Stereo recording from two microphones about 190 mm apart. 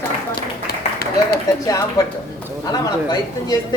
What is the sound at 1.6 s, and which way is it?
Speech, 20° left (ahead or behind).